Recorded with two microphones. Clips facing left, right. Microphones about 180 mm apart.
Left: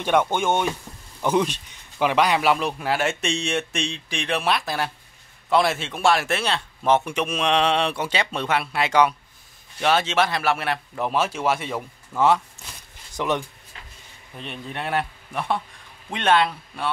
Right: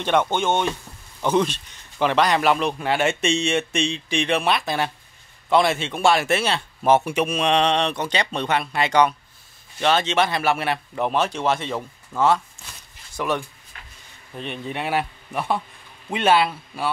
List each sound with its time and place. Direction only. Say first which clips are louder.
0.0 s a man's voice: even; 10° left (ahead or behind)
14.3 s a man's voice: right 4 dB; centre (ahead or behind)